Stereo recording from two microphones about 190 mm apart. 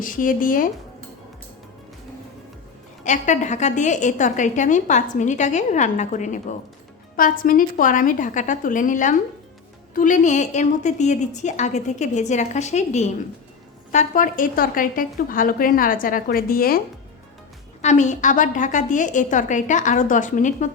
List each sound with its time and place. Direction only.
0.0 s a woman's voice: 45° left (ahead or behind)
3.0 s a woman's voice: 40° left (ahead or behind)
17.8 s a woman's voice: 40° left (ahead or behind)